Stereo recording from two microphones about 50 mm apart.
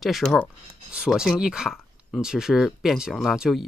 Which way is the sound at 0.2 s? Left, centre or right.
Centre.